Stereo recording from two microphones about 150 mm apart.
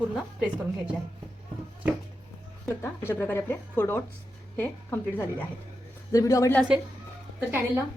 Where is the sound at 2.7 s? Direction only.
15° left (ahead or behind).